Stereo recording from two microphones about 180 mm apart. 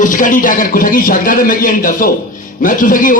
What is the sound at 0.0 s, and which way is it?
A man's voice, 45° left (ahead or behind).